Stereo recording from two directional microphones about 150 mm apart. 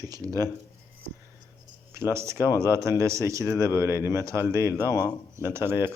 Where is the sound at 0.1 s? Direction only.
25° right (ahead or behind).